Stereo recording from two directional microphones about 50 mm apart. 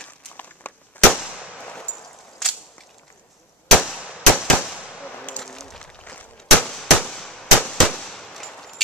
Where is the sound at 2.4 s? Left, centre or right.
Centre.